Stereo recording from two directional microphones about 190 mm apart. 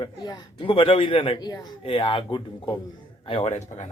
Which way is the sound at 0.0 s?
25° left (ahead or behind).